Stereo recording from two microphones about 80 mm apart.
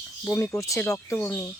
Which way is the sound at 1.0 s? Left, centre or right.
Left.